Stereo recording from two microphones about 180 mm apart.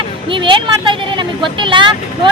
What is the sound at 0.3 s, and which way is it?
Speech, 25° right (ahead or behind).